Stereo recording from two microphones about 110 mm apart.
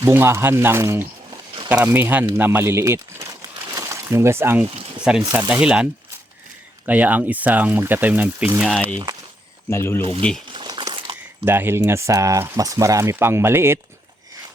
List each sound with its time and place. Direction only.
0.1 s speech: 20° right (ahead or behind)
5.1 s speech: 5° right (ahead or behind)
9.6 s speech: 25° left (ahead or behind)
10.0 s speech: 55° right (ahead or behind)
10.5 s crumpling: 45° right (ahead or behind)
11.4 s speech: 20° right (ahead or behind)